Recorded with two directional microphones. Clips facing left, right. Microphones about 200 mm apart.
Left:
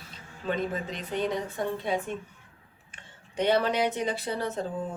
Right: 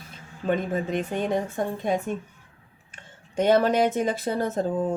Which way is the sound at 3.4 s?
45° right (ahead or behind).